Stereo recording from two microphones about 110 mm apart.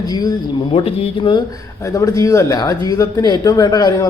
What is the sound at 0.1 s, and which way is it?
Speech, 35° left (ahead or behind).